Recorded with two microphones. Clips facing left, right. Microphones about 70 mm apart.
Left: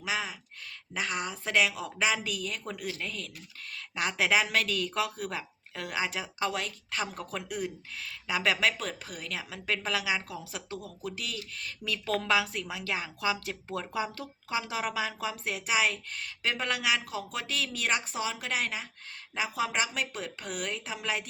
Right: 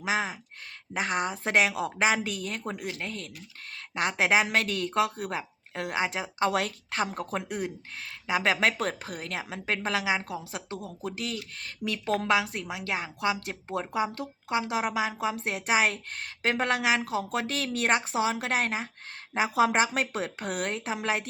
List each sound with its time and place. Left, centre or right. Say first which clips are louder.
0.0 s a woman's voice: right 5 dB; right
2.6 s a woman's voice: right 2 dB; right
6.4 s speech: right 6 dB; right
6.9 s a woman's voice: right 4 dB; right
8.6 s a woman's voice: right 3 dB; right
14.1 s a woman's voice: right 4 dB; right
17.1 s speech: right 6 dB; right
18.1 s speech: right 6 dB; right